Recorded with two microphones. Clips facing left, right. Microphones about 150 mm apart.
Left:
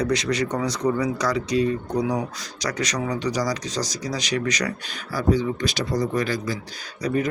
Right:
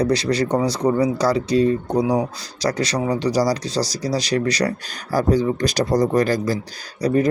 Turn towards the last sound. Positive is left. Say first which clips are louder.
# right 6 dB
turn(degrees=-35)  # may be behind; listen again after turning